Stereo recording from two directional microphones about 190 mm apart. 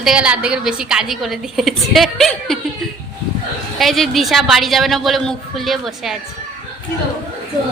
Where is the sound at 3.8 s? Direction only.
Centre (ahead or behind).